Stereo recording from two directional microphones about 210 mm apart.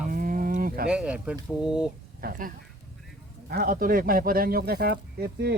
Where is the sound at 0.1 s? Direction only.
40° right (ahead or behind).